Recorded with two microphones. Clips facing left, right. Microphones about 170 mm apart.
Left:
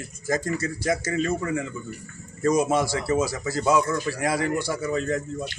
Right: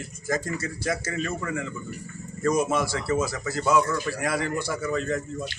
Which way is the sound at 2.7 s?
30° left (ahead or behind).